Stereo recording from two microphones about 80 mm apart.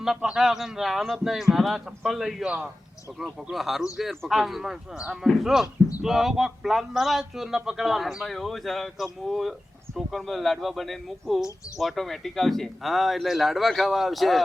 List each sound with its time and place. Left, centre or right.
0.0 s speech: centre